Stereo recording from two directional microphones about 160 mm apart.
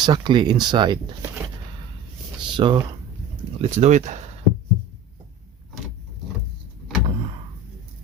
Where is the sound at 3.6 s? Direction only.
45° right (ahead or behind).